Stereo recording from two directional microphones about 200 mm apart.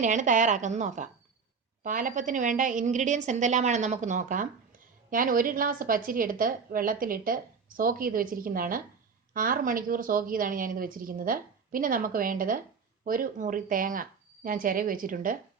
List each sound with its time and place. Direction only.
0.0 s a woman's voice: 40° right (ahead or behind)